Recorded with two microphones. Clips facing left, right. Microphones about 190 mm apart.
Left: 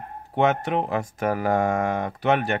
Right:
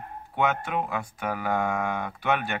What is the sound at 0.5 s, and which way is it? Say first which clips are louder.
Speech: left 5 dB; 40° left (ahead or behind).